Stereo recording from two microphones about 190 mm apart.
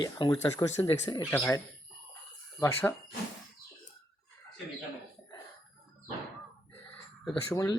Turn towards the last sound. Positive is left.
turn(degrees=20)  # may be behind; listen again after turning